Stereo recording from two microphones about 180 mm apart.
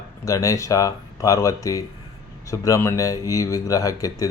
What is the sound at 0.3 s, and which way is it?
Speech, 15° left (ahead or behind).